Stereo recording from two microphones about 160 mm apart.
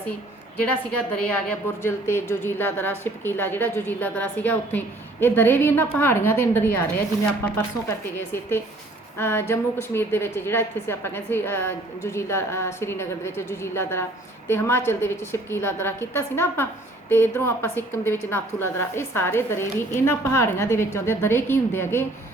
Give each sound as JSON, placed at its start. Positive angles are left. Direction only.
{"t": 1.3, "sound": "a woman's voice", "side_deg": 15}